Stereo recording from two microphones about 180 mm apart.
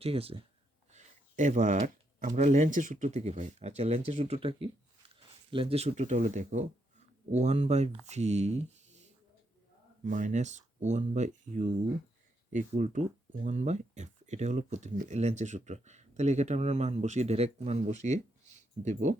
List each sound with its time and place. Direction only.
0.0 s speech: 30° right (ahead or behind)
0.9 s speech: 45° right (ahead or behind)